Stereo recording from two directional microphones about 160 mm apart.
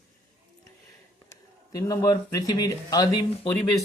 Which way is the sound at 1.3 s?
20° left (ahead or behind).